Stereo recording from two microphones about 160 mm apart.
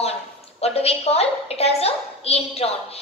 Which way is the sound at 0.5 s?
40° left (ahead or behind).